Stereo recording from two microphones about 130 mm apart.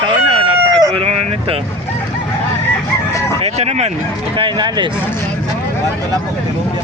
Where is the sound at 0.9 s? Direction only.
50° right (ahead or behind).